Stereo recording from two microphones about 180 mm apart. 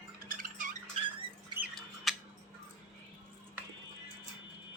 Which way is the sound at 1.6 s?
Centre (ahead or behind).